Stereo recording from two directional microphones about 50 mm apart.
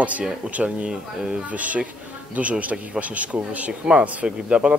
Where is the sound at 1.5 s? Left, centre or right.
Right.